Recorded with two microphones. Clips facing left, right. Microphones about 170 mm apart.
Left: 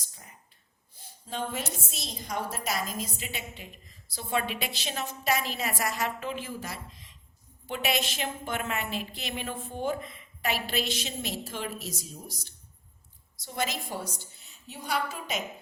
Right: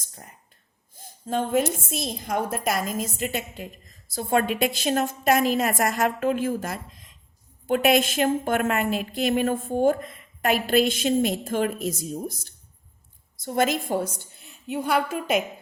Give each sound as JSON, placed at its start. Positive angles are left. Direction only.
{"t": 0.0, "sound": "whispering", "side_deg": -55}
{"t": 0.9, "sound": "a woman's voice", "side_deg": -50}